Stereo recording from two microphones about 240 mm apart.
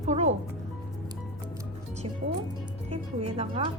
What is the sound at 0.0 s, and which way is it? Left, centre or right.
Music, right.